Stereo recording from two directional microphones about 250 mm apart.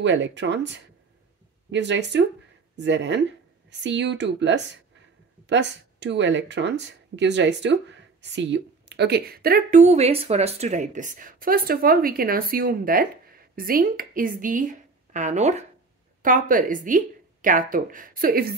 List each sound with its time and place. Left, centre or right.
0.0 s a woman's voice: right